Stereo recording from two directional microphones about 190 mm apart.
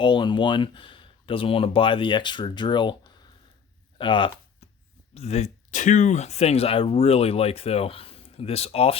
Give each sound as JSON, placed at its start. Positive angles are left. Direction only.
{"t": 0.0, "sound": "speech", "side_deg": 25}
{"t": 3.9, "sound": "a sound", "side_deg": 25}
{"t": 5.1, "sound": "speech", "side_deg": 35}